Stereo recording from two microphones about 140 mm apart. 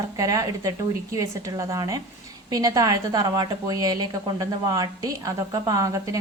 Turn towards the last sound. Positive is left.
turn(degrees=-25)  # may be behind; listen again after turning